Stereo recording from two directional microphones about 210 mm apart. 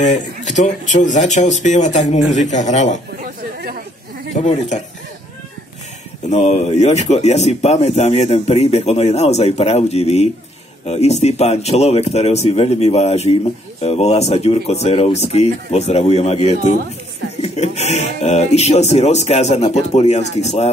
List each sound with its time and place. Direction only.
0.0 s speech: 35° left (ahead or behind)
3.6 s chatter: 45° right (ahead or behind)
4.4 s speech: 30° left (ahead or behind)
6.2 s speech: 30° left (ahead or behind)